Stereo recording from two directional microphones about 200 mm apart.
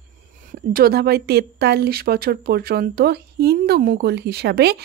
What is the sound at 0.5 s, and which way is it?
Speech, 50° right (ahead or behind).